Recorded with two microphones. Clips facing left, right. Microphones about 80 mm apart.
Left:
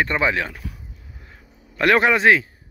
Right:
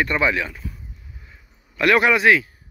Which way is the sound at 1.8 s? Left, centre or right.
Left.